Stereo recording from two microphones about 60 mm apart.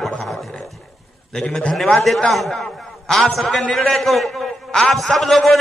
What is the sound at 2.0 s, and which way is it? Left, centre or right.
A man's voice, centre.